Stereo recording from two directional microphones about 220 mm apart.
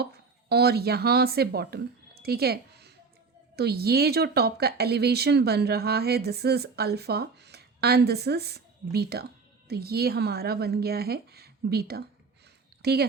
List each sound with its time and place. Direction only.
0.0 s speech: 45° right (ahead or behind)